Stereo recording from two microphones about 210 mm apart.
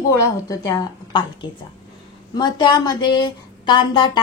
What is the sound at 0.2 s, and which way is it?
A woman's voice, 15° left (ahead or behind).